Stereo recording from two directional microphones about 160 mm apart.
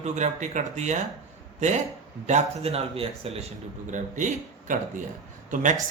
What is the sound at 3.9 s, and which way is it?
A man's voice, 50° right (ahead or behind).